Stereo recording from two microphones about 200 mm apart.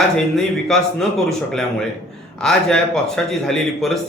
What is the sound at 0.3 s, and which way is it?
A man's voice, centre (ahead or behind).